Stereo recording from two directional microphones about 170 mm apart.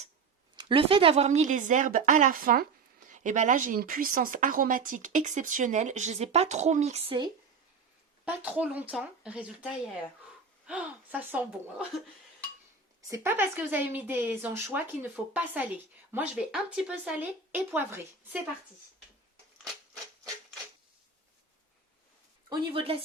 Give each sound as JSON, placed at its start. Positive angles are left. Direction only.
{"t": 0.5, "sound": "speech", "side_deg": -30}
{"t": 8.2, "sound": "speech", "side_deg": -10}
{"t": 13.0, "sound": "speech", "side_deg": -20}
{"t": 22.4, "sound": "speech", "side_deg": -35}